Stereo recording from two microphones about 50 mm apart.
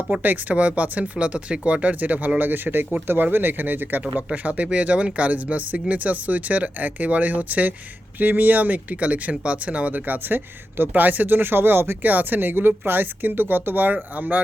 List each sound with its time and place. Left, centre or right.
0.1 s speech: right
4.3 s speech: right
12.0 s speech: right